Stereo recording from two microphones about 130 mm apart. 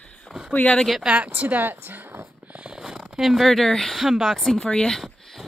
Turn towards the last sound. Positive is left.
turn(degrees=0)  # may be behind; listen again after turning